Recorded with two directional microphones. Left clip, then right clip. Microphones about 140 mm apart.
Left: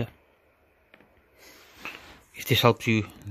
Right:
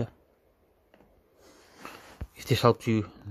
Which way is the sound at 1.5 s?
Centre (ahead or behind).